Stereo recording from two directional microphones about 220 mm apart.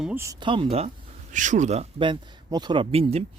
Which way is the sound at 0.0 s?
10° right (ahead or behind).